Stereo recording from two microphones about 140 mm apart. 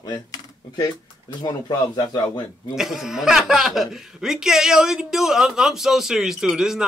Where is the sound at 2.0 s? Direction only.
30° left (ahead or behind).